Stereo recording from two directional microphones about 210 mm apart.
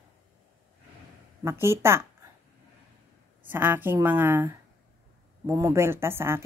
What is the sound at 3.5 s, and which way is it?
A woman's voice, 10° right (ahead or behind).